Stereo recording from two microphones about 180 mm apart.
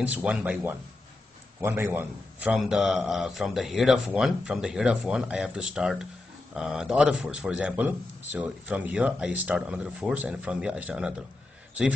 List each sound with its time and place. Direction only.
0.0 s a man's voice: 5° right (ahead or behind)